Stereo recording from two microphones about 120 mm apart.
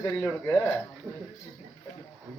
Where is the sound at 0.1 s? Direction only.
10° left (ahead or behind).